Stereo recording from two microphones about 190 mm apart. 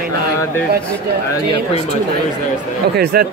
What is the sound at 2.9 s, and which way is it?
Speech, 55° right (ahead or behind).